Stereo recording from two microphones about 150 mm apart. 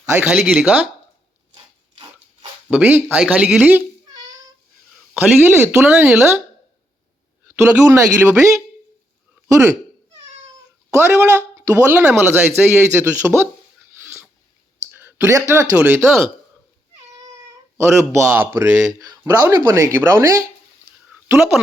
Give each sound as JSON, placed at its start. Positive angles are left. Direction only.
{"t": 0.1, "sound": "speech", "side_deg": -10}
{"t": 2.6, "sound": "speech", "side_deg": -10}
{"t": 5.1, "sound": "speech", "side_deg": -15}
{"t": 7.4, "sound": "speech", "side_deg": -15}
{"t": 10.9, "sound": "speech", "side_deg": -15}
{"t": 14.8, "sound": "clicking", "side_deg": -15}
{"t": 15.7, "sound": "speech", "side_deg": -15}
{"t": 17.7, "sound": "speech", "side_deg": -15}